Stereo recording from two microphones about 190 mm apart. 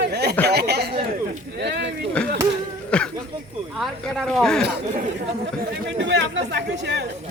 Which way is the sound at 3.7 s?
Centre (ahead or behind).